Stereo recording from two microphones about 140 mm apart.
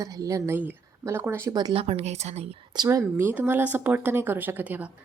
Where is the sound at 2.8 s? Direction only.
25° right (ahead or behind).